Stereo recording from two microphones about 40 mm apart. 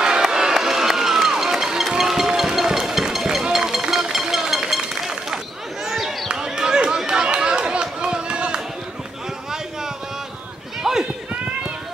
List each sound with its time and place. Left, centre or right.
0.0 s music: centre
3.5 s vehicle: centre
4.5 s run: centre
5.9 s basketball bounce: centre
6.2 s basketball bounce: centre
7.1 s run: right
10.8 s run: centre